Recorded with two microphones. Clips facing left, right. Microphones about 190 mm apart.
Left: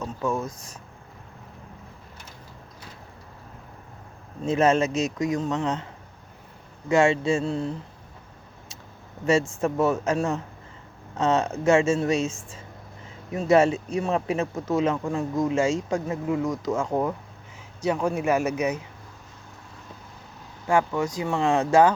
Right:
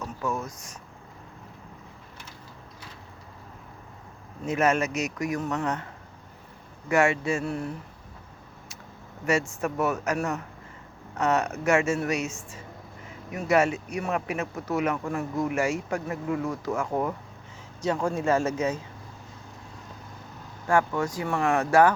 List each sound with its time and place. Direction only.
4.4 s speech: 30° left (ahead or behind)
9.6 s speech: 30° left (ahead or behind)
13.3 s speech: 30° left (ahead or behind)
20.7 s speech: 20° left (ahead or behind)